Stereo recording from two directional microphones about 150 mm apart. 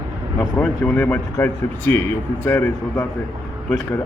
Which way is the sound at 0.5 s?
5° left (ahead or behind).